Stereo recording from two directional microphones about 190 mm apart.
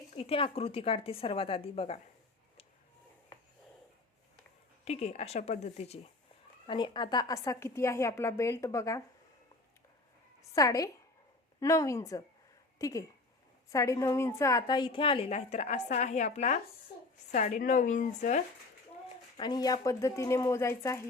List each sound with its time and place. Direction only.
0.1 s a woman's voice: 30° left (ahead or behind)
4.9 s speech: 35° left (ahead or behind); by 9.0 s 15° left (ahead or behind)
10.5 s a woman's voice: 20° left (ahead or behind); by 18.4 s 40° left (ahead or behind)
19.4 s speech: 20° left (ahead or behind)